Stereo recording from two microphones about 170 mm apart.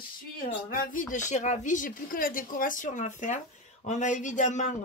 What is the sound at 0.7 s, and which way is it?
Speech, 55° left (ahead or behind).